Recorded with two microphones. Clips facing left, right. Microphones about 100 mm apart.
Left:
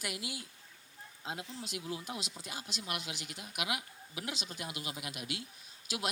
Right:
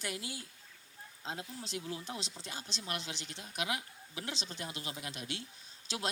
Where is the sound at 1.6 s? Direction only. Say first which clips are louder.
Even; 30° right (ahead or behind).